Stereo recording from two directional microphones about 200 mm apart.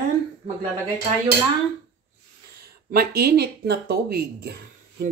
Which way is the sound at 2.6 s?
50° right (ahead or behind).